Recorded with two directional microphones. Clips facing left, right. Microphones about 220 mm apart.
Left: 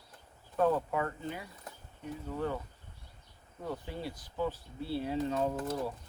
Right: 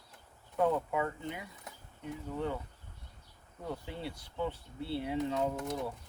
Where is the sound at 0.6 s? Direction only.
15° right (ahead or behind).